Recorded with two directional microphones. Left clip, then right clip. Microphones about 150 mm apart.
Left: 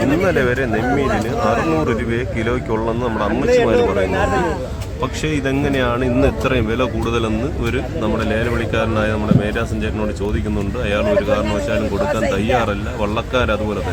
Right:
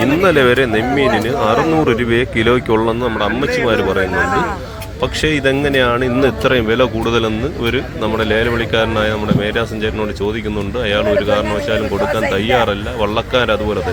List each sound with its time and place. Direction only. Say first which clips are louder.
0.2 s a man's voice: right 5 dB; 20° right (ahead or behind)
5.2 s a man's voice: right 6 dB; 30° right (ahead or behind)
10.8 s a man's voice: right 2 dB; 20° right (ahead or behind)